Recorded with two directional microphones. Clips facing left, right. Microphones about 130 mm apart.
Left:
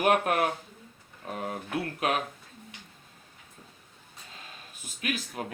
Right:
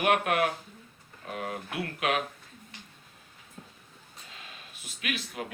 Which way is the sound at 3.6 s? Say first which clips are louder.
Right 5 dB; 70° right (ahead or behind).